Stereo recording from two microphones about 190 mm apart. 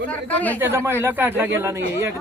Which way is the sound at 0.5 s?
10° right (ahead or behind).